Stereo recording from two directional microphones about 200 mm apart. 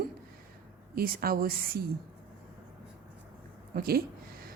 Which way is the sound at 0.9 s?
50° right (ahead or behind).